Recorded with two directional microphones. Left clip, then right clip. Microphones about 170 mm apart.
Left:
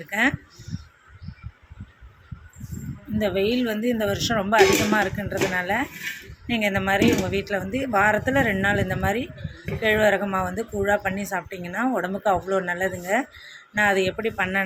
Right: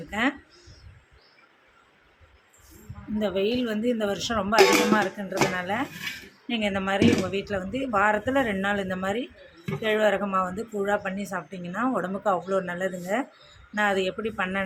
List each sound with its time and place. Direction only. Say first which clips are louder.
0.1 s speech: left 5 dB; 15° left (ahead or behind)
3.2 s speech: left 3 dB; 15° left (ahead or behind)